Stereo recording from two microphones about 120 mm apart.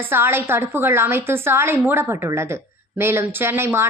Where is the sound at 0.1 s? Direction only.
20° right (ahead or behind).